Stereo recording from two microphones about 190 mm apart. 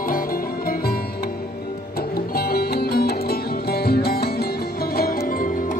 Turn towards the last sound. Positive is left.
turn(degrees=55)  # may be behind; listen again after turning